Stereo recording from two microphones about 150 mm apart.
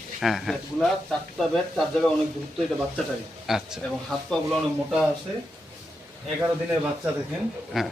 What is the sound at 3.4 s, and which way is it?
A man's voice, centre (ahead or behind).